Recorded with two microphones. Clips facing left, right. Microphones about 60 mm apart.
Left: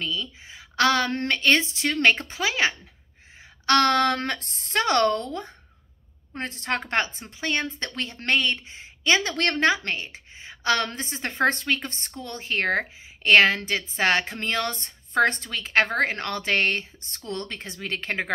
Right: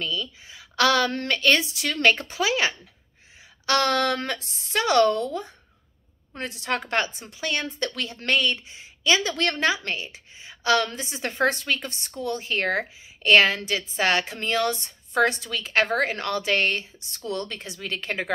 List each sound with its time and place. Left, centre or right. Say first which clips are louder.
0.0 s a woman's voice: right 1 dB; left
3.6 s a woman's voice: left 2 dB; left